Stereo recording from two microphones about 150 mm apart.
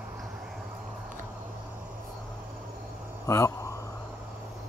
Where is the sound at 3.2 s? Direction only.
20° left (ahead or behind).